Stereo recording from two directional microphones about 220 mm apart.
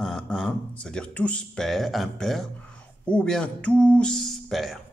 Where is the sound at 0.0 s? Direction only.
Centre (ahead or behind).